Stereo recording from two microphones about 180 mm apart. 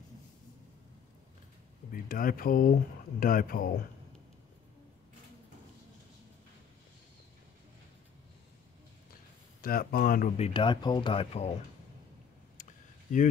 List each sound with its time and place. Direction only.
1.9 s speech: 50° left (ahead or behind)
9.6 s speech: 55° left (ahead or behind)
10.3 s speech: 35° left (ahead or behind)